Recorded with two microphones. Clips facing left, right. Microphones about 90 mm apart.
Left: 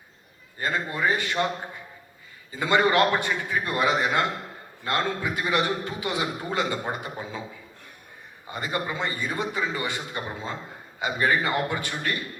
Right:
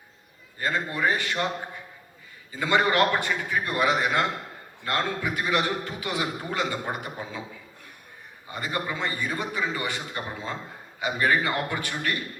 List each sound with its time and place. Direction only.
0.6 s a man's voice: 25° left (ahead or behind)
2.6 s a man's voice: 20° left (ahead or behind)
8.5 s a man's voice: 25° left (ahead or behind)
11.0 s a man's voice: 25° left (ahead or behind)